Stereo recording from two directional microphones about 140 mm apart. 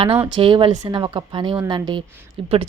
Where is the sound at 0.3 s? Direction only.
35° right (ahead or behind).